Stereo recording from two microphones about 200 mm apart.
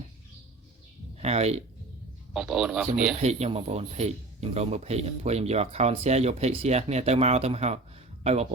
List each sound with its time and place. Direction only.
1.2 s speech: 30° right (ahead or behind)
2.3 s a man's voice: 5° right (ahead or behind)
3.2 s speech: 30° right (ahead or behind)